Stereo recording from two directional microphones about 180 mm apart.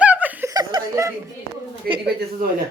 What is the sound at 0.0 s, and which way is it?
Chuckle, 10° right (ahead or behind).